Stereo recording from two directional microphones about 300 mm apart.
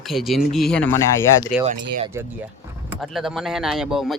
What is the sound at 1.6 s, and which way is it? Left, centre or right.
Speech, right.